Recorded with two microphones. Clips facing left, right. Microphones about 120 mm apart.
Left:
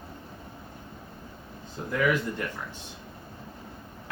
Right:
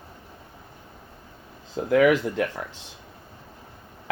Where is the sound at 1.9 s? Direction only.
90° right.